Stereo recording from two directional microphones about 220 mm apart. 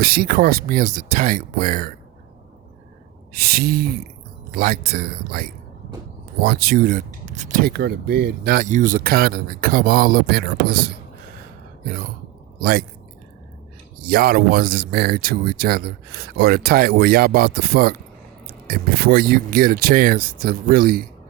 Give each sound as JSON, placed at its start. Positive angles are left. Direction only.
{"t": 0.0, "sound": "speech", "side_deg": -45}
{"t": 3.3, "sound": "speech", "side_deg": -45}
{"t": 12.5, "sound": "speech", "side_deg": -40}
{"t": 14.0, "sound": "speech", "side_deg": -45}